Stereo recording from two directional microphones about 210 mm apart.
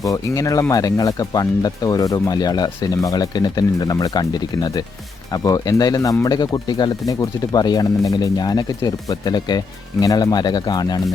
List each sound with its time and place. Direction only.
0.0 s speech: 15° left (ahead or behind)